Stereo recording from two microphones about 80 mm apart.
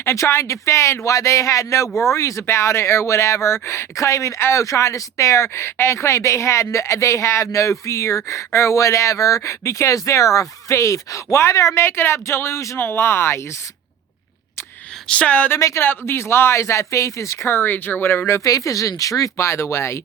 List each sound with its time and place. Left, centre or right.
0.0 s speech: left
15.0 s speech: centre
15.5 s speech: left
18.3 s speech: left